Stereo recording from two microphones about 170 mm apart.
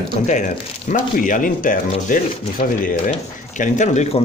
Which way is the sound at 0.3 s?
45° left (ahead or behind).